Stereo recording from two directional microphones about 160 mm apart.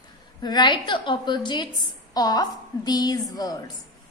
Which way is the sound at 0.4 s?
25° left (ahead or behind).